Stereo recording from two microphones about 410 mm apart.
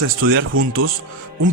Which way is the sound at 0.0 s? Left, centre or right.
Right.